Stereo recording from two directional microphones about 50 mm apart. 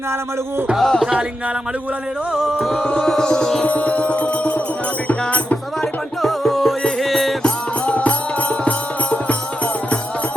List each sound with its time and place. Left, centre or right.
0.8 s music: centre
2.4 s music: centre
2.8 s music: centre
3.7 s music: left
5.8 s music: centre
7.4 s music: left